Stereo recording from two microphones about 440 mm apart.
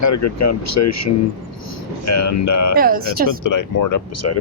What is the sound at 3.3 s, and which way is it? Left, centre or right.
Speech, left.